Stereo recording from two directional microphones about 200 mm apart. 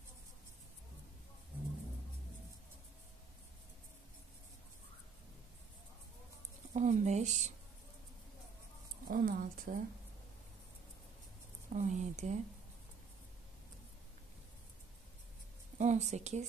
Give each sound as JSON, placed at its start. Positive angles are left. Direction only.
{"t": 6.7, "sound": "a sound", "side_deg": -35}
{"t": 9.0, "sound": "speech", "side_deg": -45}
{"t": 11.7, "sound": "speech", "side_deg": -35}
{"t": 15.8, "sound": "speech", "side_deg": -35}